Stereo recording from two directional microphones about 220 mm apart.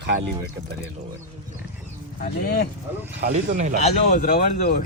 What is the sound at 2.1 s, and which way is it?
Speech, 45° left (ahead or behind).